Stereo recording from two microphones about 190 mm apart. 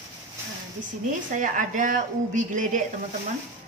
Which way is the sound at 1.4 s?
45° right (ahead or behind).